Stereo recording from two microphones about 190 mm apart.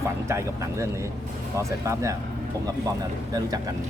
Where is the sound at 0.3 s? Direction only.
15° right (ahead or behind).